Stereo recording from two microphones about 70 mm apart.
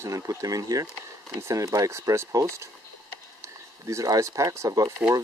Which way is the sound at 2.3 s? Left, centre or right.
Right.